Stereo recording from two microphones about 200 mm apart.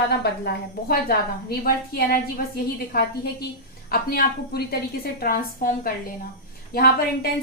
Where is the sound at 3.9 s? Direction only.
50° left (ahead or behind).